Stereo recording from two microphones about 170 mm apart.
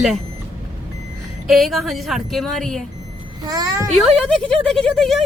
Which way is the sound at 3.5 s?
20° right (ahead or behind).